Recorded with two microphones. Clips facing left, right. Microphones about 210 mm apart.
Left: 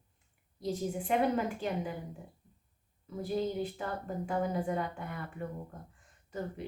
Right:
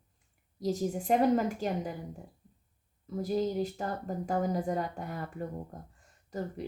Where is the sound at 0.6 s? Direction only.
40° right (ahead or behind).